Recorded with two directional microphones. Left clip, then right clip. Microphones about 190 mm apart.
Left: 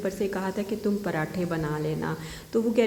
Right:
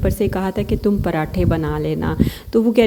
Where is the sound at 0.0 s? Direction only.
45° right (ahead or behind).